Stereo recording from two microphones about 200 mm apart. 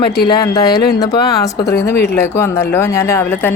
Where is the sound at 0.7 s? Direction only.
50° left (ahead or behind).